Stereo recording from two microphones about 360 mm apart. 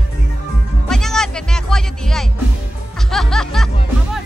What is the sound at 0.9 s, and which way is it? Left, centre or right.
Music, centre.